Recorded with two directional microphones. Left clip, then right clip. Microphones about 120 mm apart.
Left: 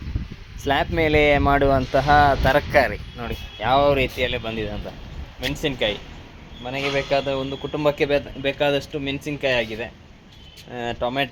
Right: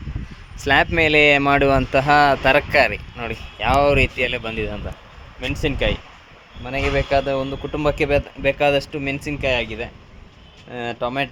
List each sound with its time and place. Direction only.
0.6 s a man's voice: 50° right (ahead or behind)
3.8 s speech: 20° right (ahead or behind)
5.4 s a man's voice: 40° right (ahead or behind)
6.7 s a man's voice: 30° right (ahead or behind)
9.2 s speech: 15° right (ahead or behind)
10.7 s a man's voice: 30° right (ahead or behind)
11.0 s speech: 20° right (ahead or behind)